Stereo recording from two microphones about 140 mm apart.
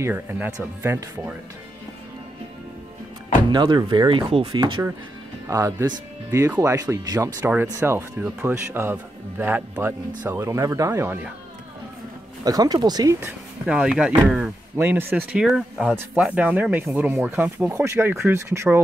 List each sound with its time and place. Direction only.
0.0 s speech: 15° right (ahead or behind)
3.4 s speech: 35° right (ahead or behind)
5.5 s speech: 20° right (ahead or behind)
12.4 s speech: 25° right (ahead or behind)
13.2 s speech: 10° right (ahead or behind)
15.4 s speech: centre (ahead or behind); by 18.8 s 20° right (ahead or behind)